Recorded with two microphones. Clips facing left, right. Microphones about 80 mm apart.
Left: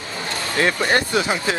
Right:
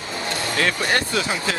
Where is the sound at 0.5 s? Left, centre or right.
Centre.